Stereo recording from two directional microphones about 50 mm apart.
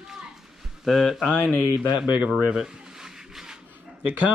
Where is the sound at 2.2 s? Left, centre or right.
Centre.